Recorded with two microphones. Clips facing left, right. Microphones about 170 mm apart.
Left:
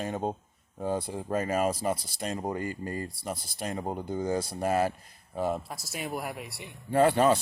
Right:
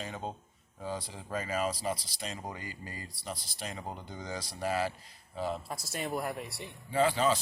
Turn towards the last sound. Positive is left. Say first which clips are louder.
# left 5 dB
turn(degrees=60)  # may be behind; listen again after turning